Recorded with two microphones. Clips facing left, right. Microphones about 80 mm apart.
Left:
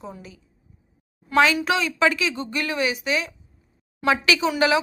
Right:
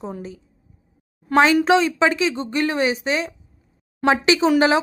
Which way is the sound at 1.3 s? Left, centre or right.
Right.